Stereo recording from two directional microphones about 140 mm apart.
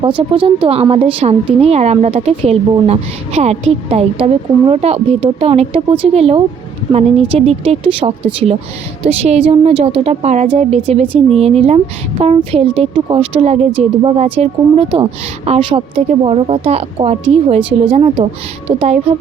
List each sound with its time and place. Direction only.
0.2 s a woman's voice: 40° right (ahead or behind)